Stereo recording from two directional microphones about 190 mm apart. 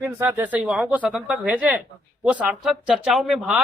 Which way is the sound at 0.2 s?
10° right (ahead or behind).